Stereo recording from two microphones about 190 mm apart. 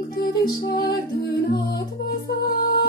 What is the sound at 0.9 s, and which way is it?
Music, 60° left (ahead or behind).